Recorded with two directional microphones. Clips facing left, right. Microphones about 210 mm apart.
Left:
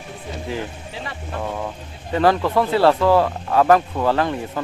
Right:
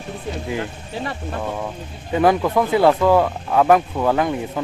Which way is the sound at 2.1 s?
10° right (ahead or behind).